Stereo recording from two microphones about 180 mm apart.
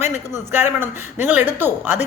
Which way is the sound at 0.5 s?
10° right (ahead or behind).